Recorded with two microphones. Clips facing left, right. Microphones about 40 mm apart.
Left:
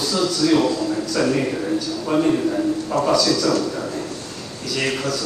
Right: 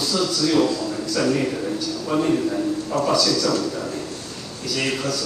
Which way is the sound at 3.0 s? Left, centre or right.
Left.